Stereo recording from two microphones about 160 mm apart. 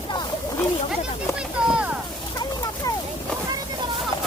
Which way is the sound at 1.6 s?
5° right (ahead or behind).